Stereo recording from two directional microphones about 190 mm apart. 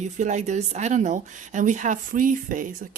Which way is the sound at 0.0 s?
40° right (ahead or behind).